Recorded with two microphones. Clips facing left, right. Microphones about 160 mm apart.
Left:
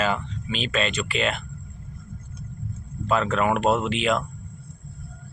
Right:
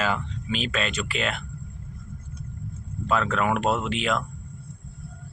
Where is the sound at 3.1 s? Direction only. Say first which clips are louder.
Left 2 dB; centre (ahead or behind).